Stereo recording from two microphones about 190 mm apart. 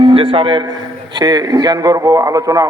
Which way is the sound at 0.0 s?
30° right (ahead or behind).